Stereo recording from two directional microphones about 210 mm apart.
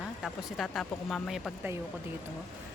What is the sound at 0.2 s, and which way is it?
Speech, centre (ahead or behind).